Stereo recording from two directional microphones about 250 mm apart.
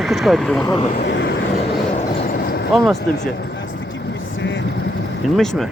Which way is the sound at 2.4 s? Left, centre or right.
Left.